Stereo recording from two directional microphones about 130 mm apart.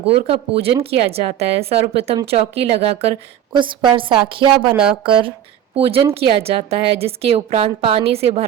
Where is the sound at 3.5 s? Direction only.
40° right (ahead or behind).